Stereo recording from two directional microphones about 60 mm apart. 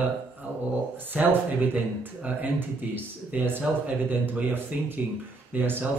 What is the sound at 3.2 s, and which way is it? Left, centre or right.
A man's voice, right.